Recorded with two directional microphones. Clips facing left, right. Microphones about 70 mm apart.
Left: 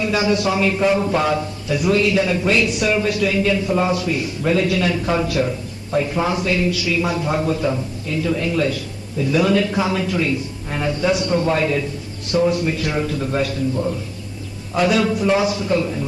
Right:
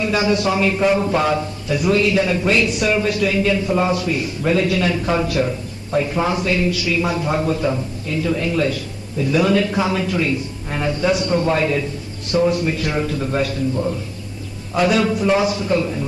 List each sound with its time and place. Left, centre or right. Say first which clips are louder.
0.0 s a man's voice: even; right
14.8 s a man's voice: even; right